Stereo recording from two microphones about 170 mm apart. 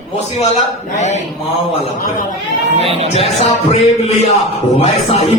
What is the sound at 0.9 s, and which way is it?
Mantra, 45° left (ahead or behind).